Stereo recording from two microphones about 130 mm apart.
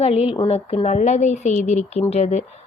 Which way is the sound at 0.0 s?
45° left (ahead or behind).